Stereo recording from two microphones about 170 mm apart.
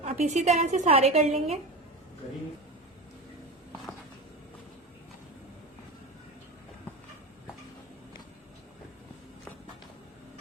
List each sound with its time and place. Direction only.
0.0 s a woman's voice: 40° right (ahead or behind)